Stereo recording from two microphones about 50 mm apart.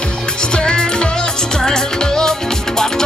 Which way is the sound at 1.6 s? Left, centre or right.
Centre.